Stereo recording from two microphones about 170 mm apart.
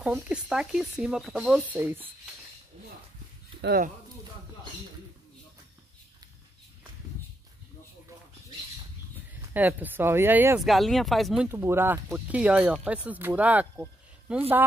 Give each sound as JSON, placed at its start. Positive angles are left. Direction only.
{"t": 0.0, "sound": "speech", "side_deg": -5}
{"t": 3.6, "sound": "speech", "side_deg": -60}
{"t": 9.5, "sound": "speech", "side_deg": -10}
{"t": 10.6, "sound": "speech", "side_deg": 0}
{"t": 11.4, "sound": "speech", "side_deg": -15}